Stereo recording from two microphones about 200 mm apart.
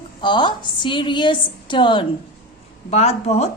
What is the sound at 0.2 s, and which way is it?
A woman's voice, 25° left (ahead or behind).